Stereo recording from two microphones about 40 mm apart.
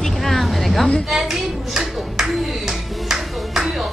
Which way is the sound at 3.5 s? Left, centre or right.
Centre.